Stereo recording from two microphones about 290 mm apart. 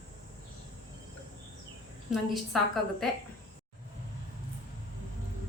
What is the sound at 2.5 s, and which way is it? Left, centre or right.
Speech, centre.